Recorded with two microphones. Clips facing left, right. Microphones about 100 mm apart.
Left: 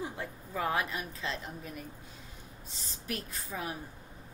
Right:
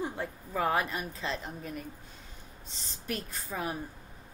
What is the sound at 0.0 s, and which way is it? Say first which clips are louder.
A woman's voice: right 4 dB; centre (ahead or behind).